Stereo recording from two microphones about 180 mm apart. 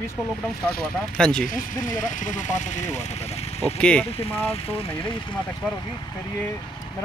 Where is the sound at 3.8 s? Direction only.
5° left (ahead or behind).